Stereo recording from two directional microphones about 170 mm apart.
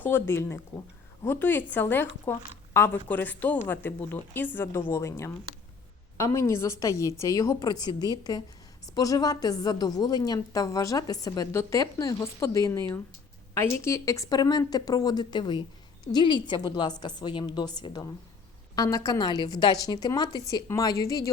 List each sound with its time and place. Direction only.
0.0 s a woman's voice: 15° left (ahead or behind)